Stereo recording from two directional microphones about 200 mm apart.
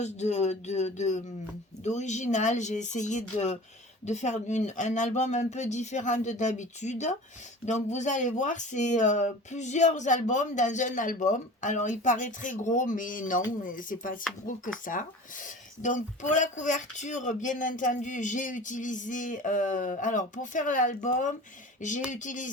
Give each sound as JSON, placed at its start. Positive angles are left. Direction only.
{"t": 0.0, "sound": "speech", "side_deg": 35}